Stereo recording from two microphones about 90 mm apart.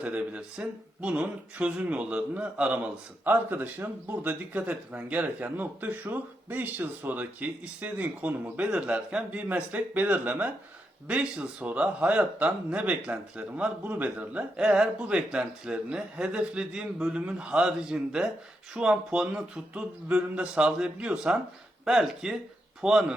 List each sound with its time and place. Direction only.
0.0 s speech: 15° right (ahead or behind)